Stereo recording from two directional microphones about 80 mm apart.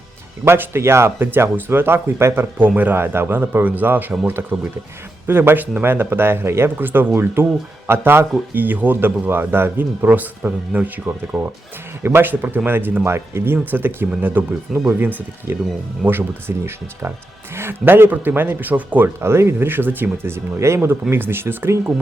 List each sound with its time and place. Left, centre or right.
0.4 s speech: right